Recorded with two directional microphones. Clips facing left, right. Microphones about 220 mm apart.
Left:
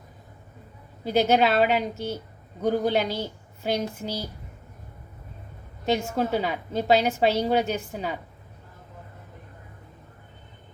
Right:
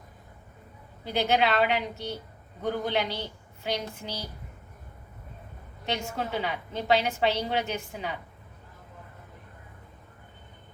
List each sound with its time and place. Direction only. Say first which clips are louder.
1.0 s a woman's voice: left 5 dB; 45° left (ahead or behind)
5.8 s a woman's voice: left 7 dB; 40° left (ahead or behind)